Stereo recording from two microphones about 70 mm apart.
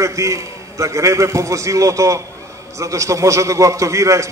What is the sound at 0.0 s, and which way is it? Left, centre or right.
A man's voice, right.